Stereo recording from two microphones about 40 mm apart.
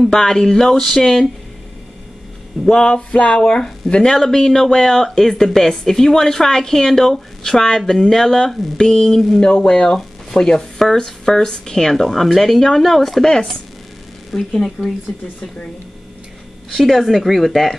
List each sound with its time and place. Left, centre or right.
0.1 s speech: centre
2.7 s music: left
4.2 s speech: centre
9.5 s music: left
11.1 s speech: centre
15.1 s music: centre
16.7 s speech: centre